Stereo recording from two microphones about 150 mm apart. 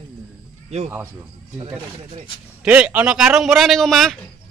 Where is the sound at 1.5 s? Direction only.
40° right (ahead or behind).